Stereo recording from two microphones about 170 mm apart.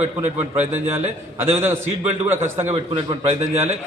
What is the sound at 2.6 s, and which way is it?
A man's voice, 35° right (ahead or behind).